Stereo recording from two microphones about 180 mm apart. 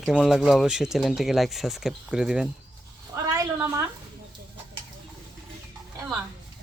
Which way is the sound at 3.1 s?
20° right (ahead or behind).